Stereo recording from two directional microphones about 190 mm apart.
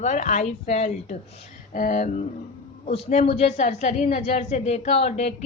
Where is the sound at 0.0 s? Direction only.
40° left (ahead or behind).